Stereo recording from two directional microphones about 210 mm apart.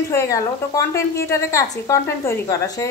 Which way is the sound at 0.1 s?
15° left (ahead or behind).